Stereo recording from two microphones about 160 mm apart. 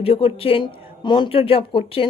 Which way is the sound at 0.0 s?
40° left (ahead or behind).